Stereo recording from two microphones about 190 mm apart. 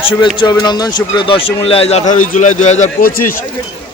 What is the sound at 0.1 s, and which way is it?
Speech, 25° left (ahead or behind).